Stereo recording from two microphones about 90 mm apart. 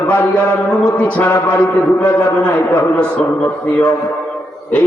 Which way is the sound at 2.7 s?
15° left (ahead or behind).